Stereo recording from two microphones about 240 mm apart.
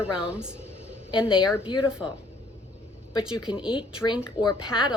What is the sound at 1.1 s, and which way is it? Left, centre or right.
Speech, left.